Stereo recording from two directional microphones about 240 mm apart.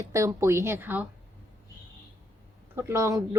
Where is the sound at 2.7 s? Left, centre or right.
Centre.